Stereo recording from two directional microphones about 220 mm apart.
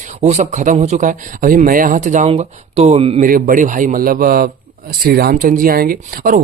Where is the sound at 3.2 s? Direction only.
40° right (ahead or behind).